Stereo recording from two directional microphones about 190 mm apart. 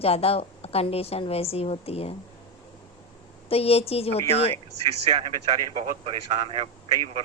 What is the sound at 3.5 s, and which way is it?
Speech, 30° left (ahead or behind).